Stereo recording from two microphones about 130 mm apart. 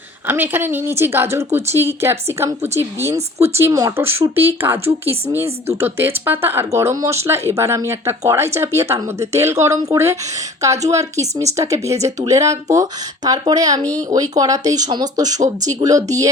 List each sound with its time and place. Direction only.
0.3 s a woman's voice: 15° right (ahead or behind)